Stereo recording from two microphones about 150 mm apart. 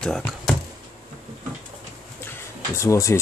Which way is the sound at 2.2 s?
15° left (ahead or behind).